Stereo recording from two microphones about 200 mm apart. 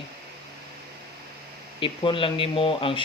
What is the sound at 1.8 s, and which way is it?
Speech, 25° left (ahead or behind).